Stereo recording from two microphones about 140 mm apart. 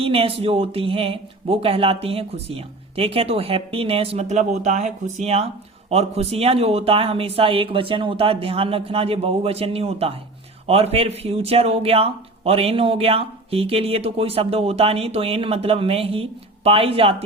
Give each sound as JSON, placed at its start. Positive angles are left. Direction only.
{"t": 0.0, "sound": "speech", "side_deg": -40}